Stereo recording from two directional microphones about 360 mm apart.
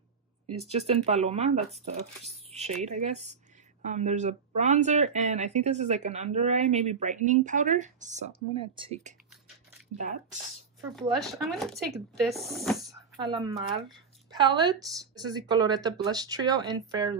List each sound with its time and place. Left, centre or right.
0.6 s speech: centre
11.0 s speech: centre